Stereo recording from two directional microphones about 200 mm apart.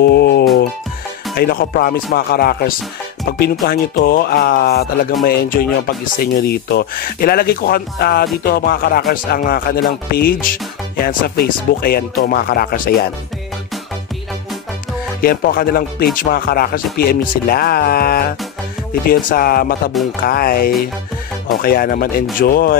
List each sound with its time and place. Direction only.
0.0 s music: 55° left (ahead or behind)
1.4 s speech: 50° left (ahead or behind)
15.2 s speech: 45° left (ahead or behind)
19.9 s music: centre (ahead or behind)
20.2 s speech: 50° left (ahead or behind)